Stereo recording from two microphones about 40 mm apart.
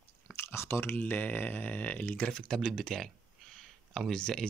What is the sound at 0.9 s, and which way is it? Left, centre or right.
Speech, left.